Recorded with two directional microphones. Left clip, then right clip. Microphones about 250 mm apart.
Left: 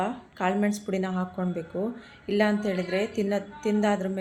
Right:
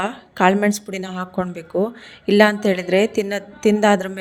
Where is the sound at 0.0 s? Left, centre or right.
Right.